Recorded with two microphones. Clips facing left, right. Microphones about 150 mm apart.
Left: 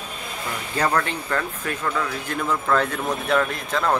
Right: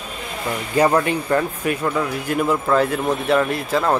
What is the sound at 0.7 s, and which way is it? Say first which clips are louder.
Speech: right 6 dB; 15° right (ahead or behind).